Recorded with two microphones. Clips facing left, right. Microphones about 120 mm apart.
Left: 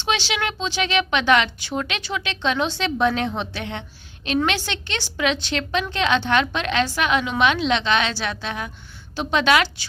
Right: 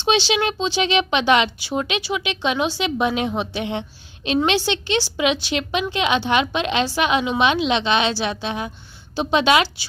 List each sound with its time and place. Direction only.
0.3 s a woman's voice: 20° right (ahead or behind)